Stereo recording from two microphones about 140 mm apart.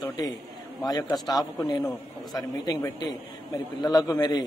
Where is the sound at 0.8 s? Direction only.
30° left (ahead or behind).